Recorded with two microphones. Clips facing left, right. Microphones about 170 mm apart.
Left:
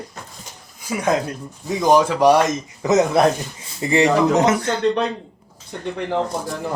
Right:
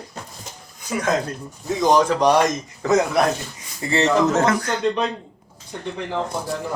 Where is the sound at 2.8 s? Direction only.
20° left (ahead or behind).